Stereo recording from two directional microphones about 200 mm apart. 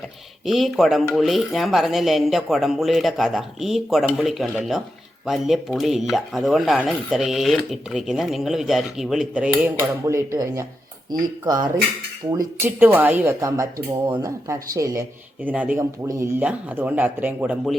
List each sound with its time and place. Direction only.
0.4 s speech: centre (ahead or behind); by 15.0 s 15° right (ahead or behind)
15.4 s speech: 5° right (ahead or behind)